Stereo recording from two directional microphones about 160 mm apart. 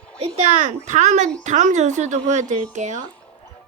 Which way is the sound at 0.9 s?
45° right (ahead or behind).